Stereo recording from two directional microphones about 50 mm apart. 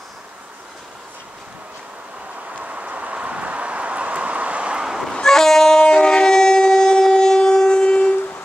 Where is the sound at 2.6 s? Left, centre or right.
Right.